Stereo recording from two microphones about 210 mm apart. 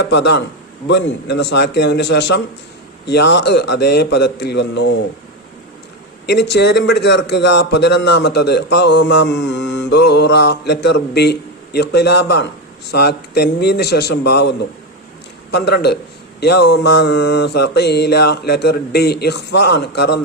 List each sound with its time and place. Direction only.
0.0 s a man's voice: 55° left (ahead or behind)
6.2 s a man's voice: 55° left (ahead or behind)
15.5 s a man's voice: 50° left (ahead or behind)